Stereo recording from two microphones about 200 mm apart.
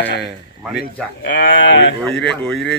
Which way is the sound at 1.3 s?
60° left (ahead or behind).